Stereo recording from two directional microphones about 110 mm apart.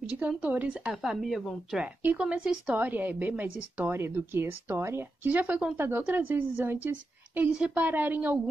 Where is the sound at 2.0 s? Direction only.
15° right (ahead or behind).